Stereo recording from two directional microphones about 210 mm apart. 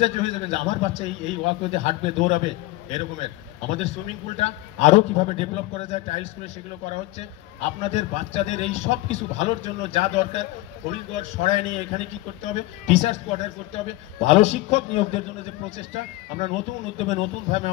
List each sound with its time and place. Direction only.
0.0 s a man's voice: 30° left (ahead or behind)